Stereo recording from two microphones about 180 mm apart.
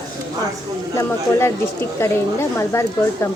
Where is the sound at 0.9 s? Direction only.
15° left (ahead or behind).